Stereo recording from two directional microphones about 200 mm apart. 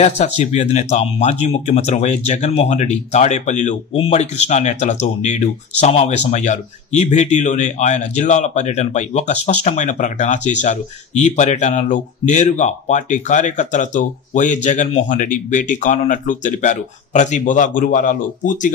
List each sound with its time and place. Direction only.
0.0 s speech: 35° left (ahead or behind)